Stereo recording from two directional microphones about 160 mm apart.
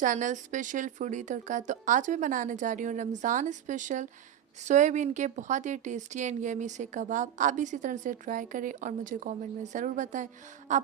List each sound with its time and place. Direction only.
0.0 s speech: 50° right (ahead or behind)